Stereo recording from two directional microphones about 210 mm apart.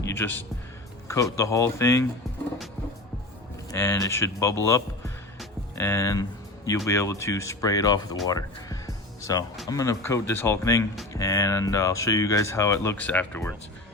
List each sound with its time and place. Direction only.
0.0 s speech: 10° left (ahead or behind)
3.7 s speech: 15° left (ahead or behind)
4.6 s music: 15° left (ahead or behind)
5.7 s speech: 15° left (ahead or behind)